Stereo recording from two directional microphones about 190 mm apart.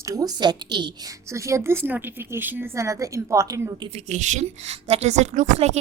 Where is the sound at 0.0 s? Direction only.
15° right (ahead or behind).